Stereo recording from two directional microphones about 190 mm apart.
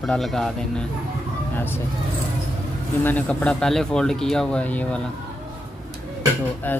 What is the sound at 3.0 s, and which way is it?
Speech, 5° left (ahead or behind).